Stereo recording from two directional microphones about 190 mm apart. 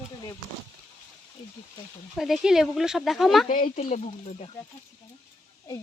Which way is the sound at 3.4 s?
45° left (ahead or behind).